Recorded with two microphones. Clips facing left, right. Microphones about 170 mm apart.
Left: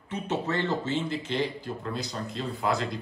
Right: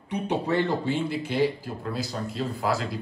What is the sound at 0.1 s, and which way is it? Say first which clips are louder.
Speech: right 4 dB; 15° right (ahead or behind).